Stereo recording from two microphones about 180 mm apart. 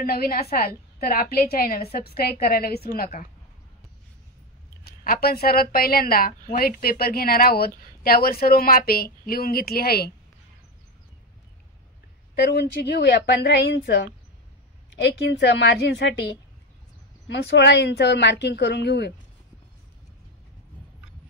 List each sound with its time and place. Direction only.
0.0 s a woman's voice: 55° left (ahead or behind)
4.8 s a woman's voice: 55° left (ahead or behind)
12.4 s a woman's voice: 65° left (ahead or behind)
15.0 s speech: 70° left (ahead or behind)
17.3 s speech: 70° left (ahead or behind)